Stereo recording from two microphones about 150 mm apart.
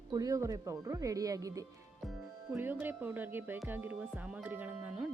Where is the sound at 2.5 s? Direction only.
10° right (ahead or behind).